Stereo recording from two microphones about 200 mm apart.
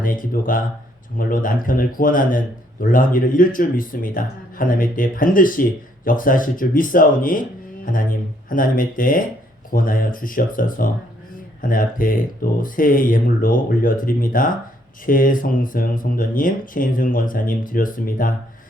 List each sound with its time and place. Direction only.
0.0 s speech: 45° left (ahead or behind)